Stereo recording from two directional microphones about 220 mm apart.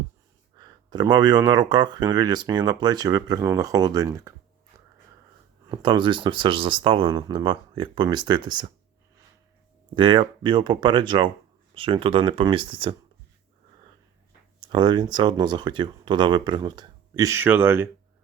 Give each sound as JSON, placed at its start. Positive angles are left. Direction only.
{"t": 0.6, "sound": "speech", "side_deg": -20}
{"t": 5.7, "sound": "speech", "side_deg": -20}
{"t": 9.9, "sound": "speech", "side_deg": -20}
{"t": 14.6, "sound": "speech", "side_deg": -20}